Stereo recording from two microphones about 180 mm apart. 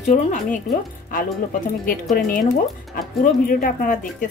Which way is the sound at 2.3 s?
50° left (ahead or behind).